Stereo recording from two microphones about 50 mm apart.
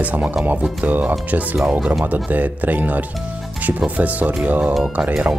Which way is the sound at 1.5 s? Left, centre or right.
Centre.